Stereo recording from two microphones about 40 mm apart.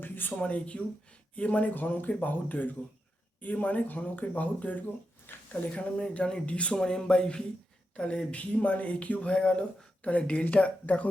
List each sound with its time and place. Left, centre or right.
0.0 s a sound: left
0.3 s speech: left
1.7 s speech: left
6.7 s speech: centre; by 9.3 s left
9.3 s speech: left